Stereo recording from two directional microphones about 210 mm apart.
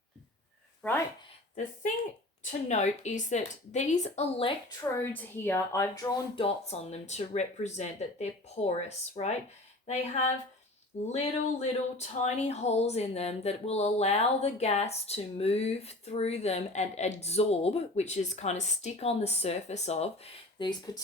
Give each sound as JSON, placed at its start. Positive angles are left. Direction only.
{"t": 0.8, "sound": "speech", "side_deg": 10}
{"t": 2.4, "sound": "speech", "side_deg": 35}
{"t": 4.8, "sound": "speech", "side_deg": 10}